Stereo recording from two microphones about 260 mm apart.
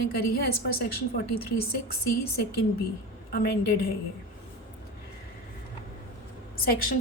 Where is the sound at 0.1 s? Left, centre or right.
Left.